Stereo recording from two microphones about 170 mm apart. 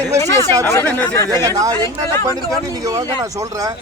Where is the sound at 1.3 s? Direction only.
20° right (ahead or behind).